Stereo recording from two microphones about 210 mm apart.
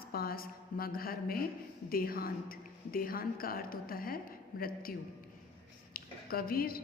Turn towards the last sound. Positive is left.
turn(degrees=45)  # may be behind; listen again after turning